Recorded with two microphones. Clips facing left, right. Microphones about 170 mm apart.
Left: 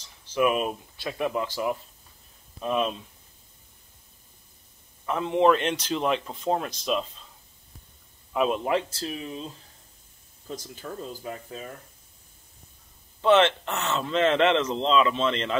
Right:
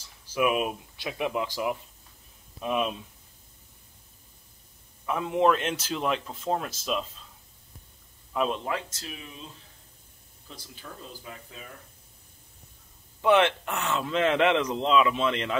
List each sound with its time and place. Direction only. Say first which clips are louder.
0.0 s speech: left 2 dB; 5° right (ahead or behind)
5.0 s a man's voice: left 2 dB; 5° right (ahead or behind)
8.3 s a man's voice: left 3 dB; 5° left (ahead or behind)
8.6 s speech: left 7 dB; 30° left (ahead or behind)
10.5 s speech: left 8 dB; 45° left (ahead or behind)
13.2 s speech: left 2 dB; 10° right (ahead or behind)